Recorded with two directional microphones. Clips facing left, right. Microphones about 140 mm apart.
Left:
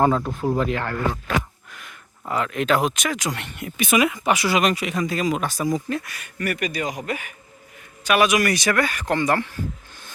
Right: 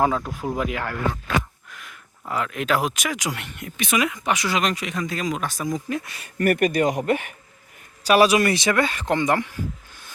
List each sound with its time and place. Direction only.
0.0 s speech: centre (ahead or behind)
5.9 s speech: 25° right (ahead or behind)
6.4 s speech: 50° right (ahead or behind)
8.0 s speech: 35° right (ahead or behind); by 9.6 s 15° right (ahead or behind)